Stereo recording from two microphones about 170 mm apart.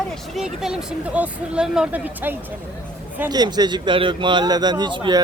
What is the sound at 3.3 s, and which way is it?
A man's voice, 25° right (ahead or behind).